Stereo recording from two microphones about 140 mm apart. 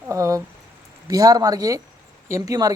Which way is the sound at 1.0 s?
25° right (ahead or behind).